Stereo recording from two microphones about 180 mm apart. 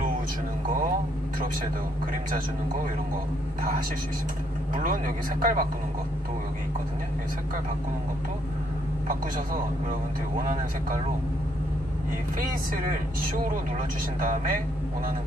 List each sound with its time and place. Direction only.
4.7 s speech: 50° right (ahead or behind)
10.3 s speech: 50° right (ahead or behind)
14.2 s speech: 50° right (ahead or behind)